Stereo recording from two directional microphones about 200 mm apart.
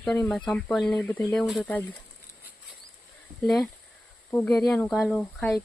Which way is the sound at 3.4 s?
Centre (ahead or behind).